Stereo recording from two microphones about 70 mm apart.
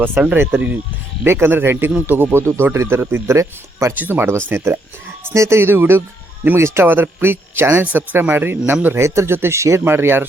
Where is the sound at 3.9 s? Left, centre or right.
Right.